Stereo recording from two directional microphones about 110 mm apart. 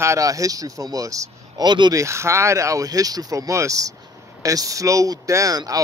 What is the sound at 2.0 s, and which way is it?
Speech, 25° right (ahead or behind).